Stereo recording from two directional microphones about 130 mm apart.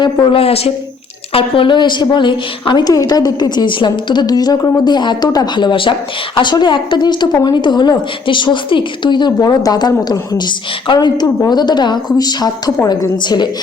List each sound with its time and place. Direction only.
0.0 s a woman's voice: 40° left (ahead or behind)